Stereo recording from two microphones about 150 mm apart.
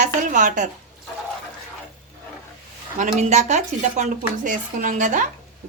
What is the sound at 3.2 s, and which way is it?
Speech, 50° right (ahead or behind).